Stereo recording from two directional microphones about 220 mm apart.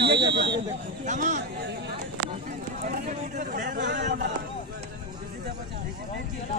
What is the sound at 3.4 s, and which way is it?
Speech, 35° right (ahead or behind).